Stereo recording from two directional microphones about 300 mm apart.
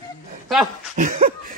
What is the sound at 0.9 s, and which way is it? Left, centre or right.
Speech, right.